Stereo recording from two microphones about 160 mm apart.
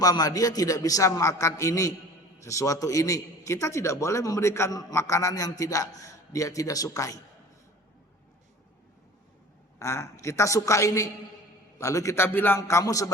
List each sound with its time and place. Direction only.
0.0 s a man's voice: 25° left (ahead or behind)
9.7 s a man's voice: 15° left (ahead or behind)